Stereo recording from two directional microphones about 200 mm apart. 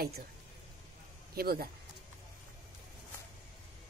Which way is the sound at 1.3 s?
50° right (ahead or behind).